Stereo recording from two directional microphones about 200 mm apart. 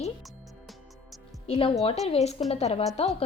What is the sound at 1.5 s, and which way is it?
A woman's voice, 25° left (ahead or behind).